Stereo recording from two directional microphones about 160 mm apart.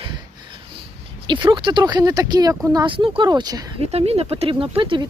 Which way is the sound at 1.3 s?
30° right (ahead or behind).